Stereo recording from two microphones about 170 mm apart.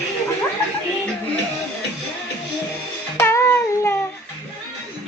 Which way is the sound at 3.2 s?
15° left (ahead or behind).